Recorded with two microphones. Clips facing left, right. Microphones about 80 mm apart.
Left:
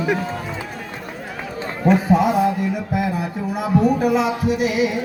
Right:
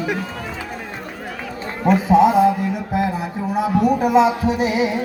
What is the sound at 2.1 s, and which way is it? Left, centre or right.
Music, right.